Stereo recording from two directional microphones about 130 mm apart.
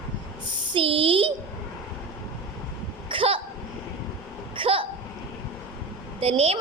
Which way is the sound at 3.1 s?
45° right (ahead or behind).